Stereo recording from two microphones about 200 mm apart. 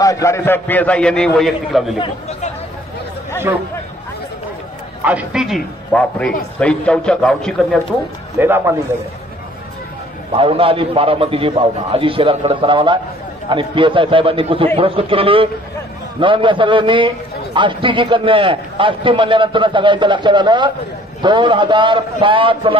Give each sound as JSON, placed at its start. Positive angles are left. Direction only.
{"t": 0.0, "sound": "a man's voice", "side_deg": 15}
{"t": 2.0, "sound": "speech", "side_deg": 30}
{"t": 3.5, "sound": "a man's voice", "side_deg": -15}
{"t": 5.0, "sound": "a man's voice", "side_deg": -5}
{"t": 8.4, "sound": "a man's voice", "side_deg": -10}
{"t": 10.3, "sound": "a man's voice", "side_deg": -25}